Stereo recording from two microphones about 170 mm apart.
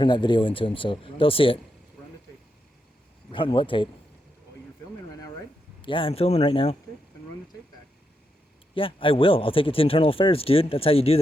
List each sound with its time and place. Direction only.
0.0 s speech: 25° left (ahead or behind)
3.3 s speech: 30° left (ahead or behind)
5.8 s speech: 30° left (ahead or behind)
8.7 s speech: 30° left (ahead or behind)